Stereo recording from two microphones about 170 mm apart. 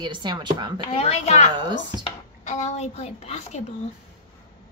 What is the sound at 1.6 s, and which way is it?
Speech, 25° right (ahead or behind).